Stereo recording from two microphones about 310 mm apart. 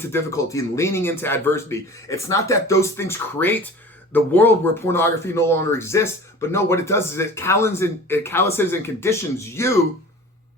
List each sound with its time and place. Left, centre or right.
0.1 s speech: centre